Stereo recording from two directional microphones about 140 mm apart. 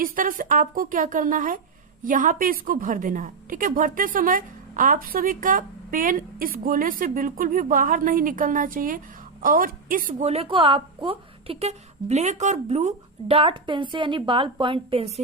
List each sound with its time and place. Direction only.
0.0 s a woman's voice: 75° right (ahead or behind)
10.2 s a woman's voice: 45° right (ahead or behind)